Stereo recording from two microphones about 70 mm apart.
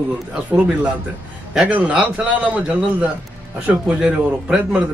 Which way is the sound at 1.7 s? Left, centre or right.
Centre.